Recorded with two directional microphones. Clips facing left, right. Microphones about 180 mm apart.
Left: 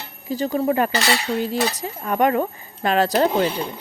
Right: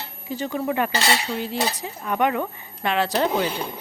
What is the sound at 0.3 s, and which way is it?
Speech, 40° left (ahead or behind).